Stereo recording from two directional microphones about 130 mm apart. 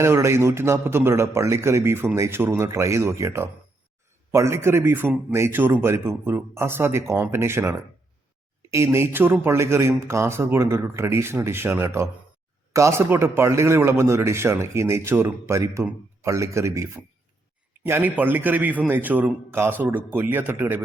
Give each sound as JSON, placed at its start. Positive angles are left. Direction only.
{"t": 0.0, "sound": "a man's voice", "side_deg": -20}